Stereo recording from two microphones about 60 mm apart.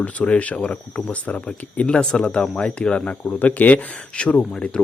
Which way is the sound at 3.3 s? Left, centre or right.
Left.